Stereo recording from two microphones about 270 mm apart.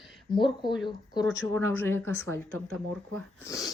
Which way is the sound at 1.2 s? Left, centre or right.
Right.